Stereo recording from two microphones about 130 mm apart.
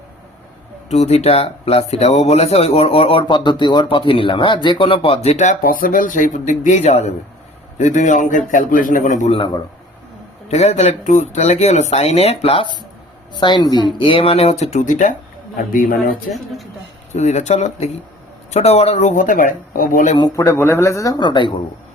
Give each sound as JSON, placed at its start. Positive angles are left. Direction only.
{"t": 0.9, "sound": "speech", "side_deg": 55}
{"t": 5.8, "sound": "speech", "side_deg": 90}
{"t": 9.3, "sound": "a man's voice", "side_deg": 40}
{"t": 10.5, "sound": "speech", "side_deg": 60}
{"t": 13.4, "sound": "speech", "side_deg": 35}
{"t": 15.5, "sound": "speech", "side_deg": 90}
{"t": 17.1, "sound": "speech", "side_deg": 60}
{"t": 20.1, "sound": "speech", "side_deg": 25}